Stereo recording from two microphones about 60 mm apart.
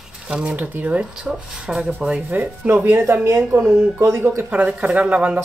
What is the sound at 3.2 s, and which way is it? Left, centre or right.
Speech, right.